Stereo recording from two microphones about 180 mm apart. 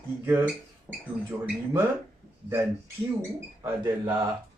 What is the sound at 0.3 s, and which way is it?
Speech, 10° right (ahead or behind).